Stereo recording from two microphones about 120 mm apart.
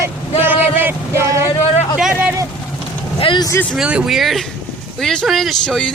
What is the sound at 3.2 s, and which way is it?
Vehicle, 45° left (ahead or behind).